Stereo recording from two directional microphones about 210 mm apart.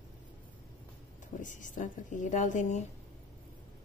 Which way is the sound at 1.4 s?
35° left (ahead or behind).